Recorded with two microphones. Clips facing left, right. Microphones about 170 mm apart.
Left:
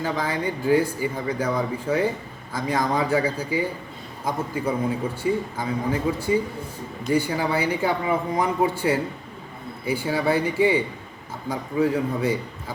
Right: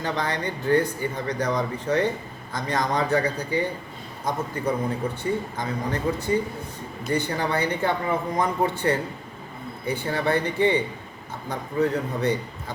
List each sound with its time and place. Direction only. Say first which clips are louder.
0.0 s speech: left 2 dB; 5° left (ahead or behind)